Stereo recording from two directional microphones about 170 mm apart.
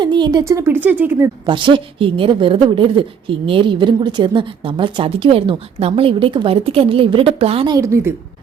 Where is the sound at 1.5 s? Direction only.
30° right (ahead or behind).